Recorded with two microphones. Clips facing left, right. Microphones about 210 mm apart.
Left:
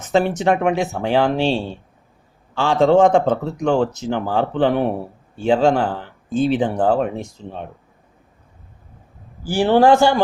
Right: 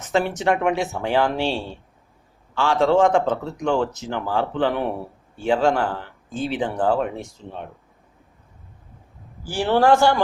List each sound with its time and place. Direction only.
0.3 s speech: 20° left (ahead or behind)
9.5 s speech: 30° left (ahead or behind)